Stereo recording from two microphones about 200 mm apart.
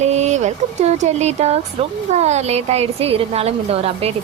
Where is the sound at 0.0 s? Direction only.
35° right (ahead or behind).